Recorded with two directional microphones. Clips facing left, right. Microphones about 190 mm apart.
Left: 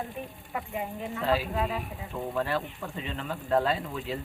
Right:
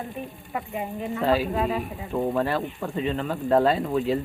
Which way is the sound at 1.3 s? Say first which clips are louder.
Right 4 dB; 40° right (ahead or behind).